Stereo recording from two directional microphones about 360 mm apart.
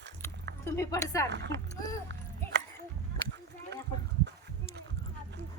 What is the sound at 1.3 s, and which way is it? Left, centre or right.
Speech, right.